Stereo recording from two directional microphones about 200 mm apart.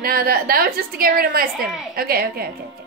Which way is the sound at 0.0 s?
50° right (ahead or behind).